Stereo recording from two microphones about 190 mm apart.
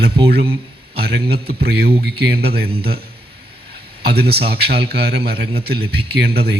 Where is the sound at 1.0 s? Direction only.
55° right (ahead or behind).